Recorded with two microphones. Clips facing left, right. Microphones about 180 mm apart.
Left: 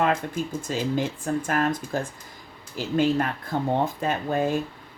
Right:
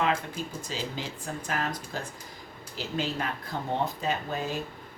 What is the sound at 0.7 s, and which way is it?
Speech, 50° left (ahead or behind).